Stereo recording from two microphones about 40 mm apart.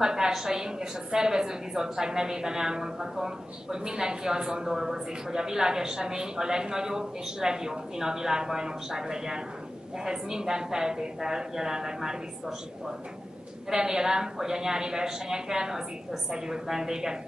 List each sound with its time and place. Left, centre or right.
0.0 s a woman's voice: centre
13.7 s a woman's voice: centre